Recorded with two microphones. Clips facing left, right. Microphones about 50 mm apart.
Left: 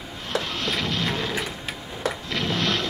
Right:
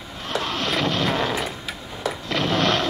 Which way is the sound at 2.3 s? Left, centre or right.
Right.